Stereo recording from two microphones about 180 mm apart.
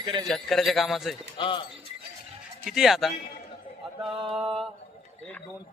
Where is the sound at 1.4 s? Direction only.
30° left (ahead or behind).